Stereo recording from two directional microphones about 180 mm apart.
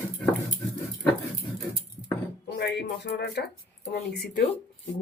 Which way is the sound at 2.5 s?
65° left (ahead or behind).